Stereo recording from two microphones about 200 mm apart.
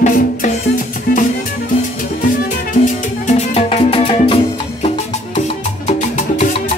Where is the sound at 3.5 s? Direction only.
30° left (ahead or behind).